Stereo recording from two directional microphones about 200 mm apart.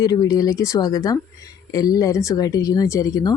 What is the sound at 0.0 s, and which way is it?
Speech, 20° left (ahead or behind).